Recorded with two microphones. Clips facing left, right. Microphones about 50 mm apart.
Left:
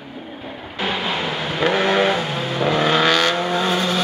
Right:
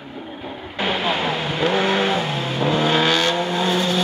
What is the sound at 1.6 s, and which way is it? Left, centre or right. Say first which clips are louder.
Vehicle: left 2 dB; left.